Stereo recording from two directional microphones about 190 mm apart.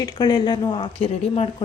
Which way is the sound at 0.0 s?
20° left (ahead or behind).